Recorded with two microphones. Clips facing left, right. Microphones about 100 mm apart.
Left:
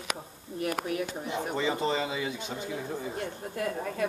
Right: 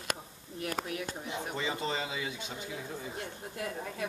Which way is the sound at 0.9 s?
40° left (ahead or behind).